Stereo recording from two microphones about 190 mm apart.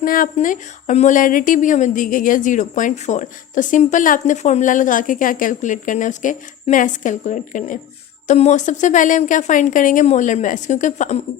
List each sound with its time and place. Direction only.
0.0 s speech: 45° left (ahead or behind)